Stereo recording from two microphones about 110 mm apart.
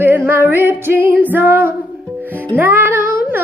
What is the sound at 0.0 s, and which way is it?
Music, 20° right (ahead or behind).